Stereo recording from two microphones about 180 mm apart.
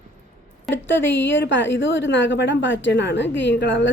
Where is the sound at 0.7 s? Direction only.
90° left.